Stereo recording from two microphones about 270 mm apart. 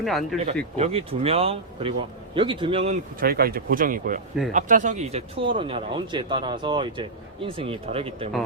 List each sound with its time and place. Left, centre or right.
0.0 s speech: centre
0.8 s speech: right